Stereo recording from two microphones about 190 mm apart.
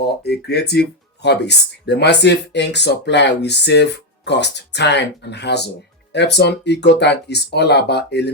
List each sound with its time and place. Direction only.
0.0 s speech: 60° left (ahead or behind)